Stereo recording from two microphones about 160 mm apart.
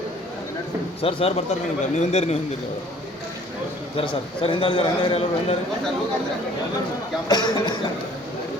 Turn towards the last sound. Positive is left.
turn(degrees=25)  # may be behind; listen again after turning